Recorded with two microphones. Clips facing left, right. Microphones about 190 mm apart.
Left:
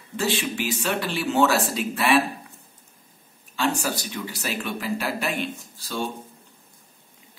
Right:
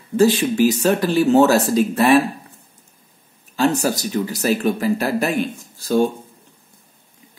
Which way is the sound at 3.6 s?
40° right (ahead or behind).